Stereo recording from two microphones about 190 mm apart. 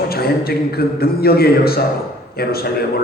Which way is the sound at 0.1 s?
55° left (ahead or behind).